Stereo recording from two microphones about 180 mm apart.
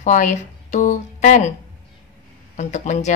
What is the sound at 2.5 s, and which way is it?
Speech, 40° left (ahead or behind).